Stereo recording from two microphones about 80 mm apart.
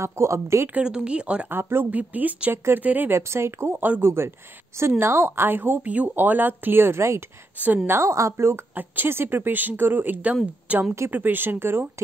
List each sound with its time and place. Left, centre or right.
0.0 s speech: right
0.7 s speech: centre
1.5 s a woman's voice: right
3.1 s a woman's voice: right
7.5 s a woman's voice: right
7.9 s a woman's voice: right